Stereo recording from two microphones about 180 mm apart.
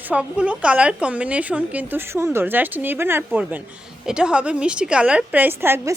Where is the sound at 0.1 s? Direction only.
5° right (ahead or behind).